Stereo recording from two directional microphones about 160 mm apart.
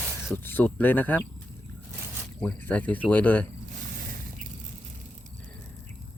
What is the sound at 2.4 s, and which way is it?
Speech, 10° left (ahead or behind).